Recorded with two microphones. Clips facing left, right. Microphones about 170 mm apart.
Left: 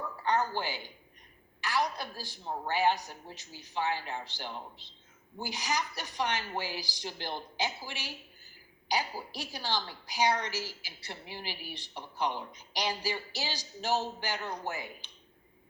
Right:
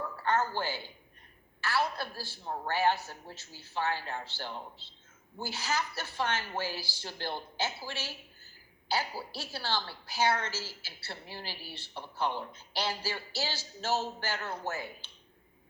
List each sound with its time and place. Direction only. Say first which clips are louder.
0.2 s a woman's voice: even; 15° left (ahead or behind)